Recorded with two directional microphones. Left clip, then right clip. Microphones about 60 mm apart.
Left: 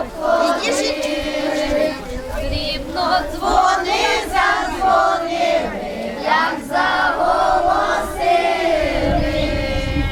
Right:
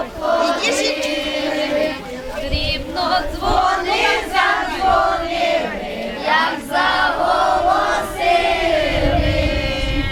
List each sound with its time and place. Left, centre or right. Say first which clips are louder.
0.3 s choir: even; centre
1.5 s a sound: left 1 dB; centre
3.0 s choir: left 1 dB; centre
3.5 s crowd: left 2 dB; centre
3.9 s choir: right 1 dB; right
4.4 s a sound: left 1 dB; centre
4.8 s battle cry: left 1 dB; right
6.2 s battle cry: even; centre
9.2 s a sound: right 1 dB; centre